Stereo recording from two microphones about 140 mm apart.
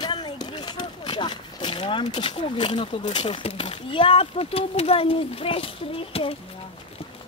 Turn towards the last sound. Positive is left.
turn(degrees=40)  # may be behind; listen again after turning